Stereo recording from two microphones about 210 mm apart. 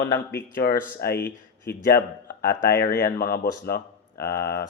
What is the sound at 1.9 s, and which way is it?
Speech, 45° left (ahead or behind).